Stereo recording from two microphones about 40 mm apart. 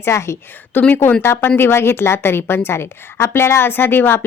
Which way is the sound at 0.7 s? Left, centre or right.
Left.